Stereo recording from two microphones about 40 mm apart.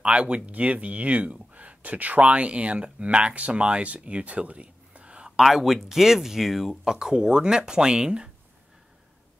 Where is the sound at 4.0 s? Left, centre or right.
Right.